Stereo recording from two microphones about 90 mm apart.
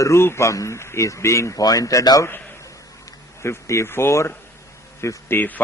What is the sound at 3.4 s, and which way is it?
A man's voice, 30° left (ahead or behind).